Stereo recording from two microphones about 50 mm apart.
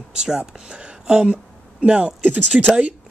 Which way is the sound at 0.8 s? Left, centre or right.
Centre.